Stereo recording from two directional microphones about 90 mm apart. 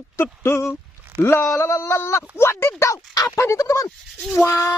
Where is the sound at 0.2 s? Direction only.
30° left (ahead or behind).